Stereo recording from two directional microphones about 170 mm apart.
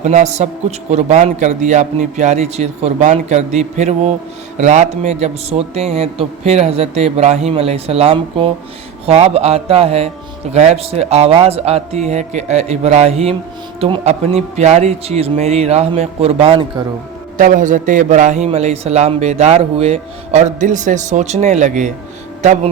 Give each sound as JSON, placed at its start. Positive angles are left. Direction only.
{"t": 0.0, "sound": "a man's voice", "side_deg": -40}
{"t": 17.3, "sound": "a man's voice", "side_deg": -50}